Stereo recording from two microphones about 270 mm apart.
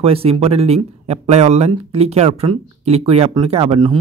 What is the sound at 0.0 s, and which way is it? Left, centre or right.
Speech, right.